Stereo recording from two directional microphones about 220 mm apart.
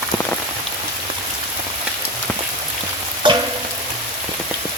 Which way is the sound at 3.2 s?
20° right (ahead or behind).